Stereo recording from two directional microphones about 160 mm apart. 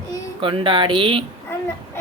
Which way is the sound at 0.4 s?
30° right (ahead or behind).